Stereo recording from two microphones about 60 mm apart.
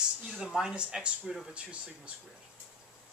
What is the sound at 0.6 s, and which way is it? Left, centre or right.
Speech, centre.